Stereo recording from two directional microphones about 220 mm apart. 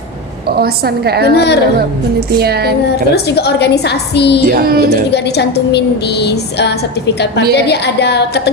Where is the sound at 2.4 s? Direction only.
45° right (ahead or behind).